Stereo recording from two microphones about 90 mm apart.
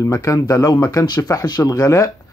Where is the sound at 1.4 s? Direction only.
50° left (ahead or behind).